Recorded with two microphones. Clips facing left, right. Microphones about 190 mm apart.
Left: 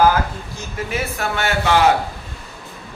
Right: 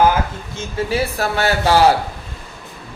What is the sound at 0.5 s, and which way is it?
A man's voice, 30° right (ahead or behind).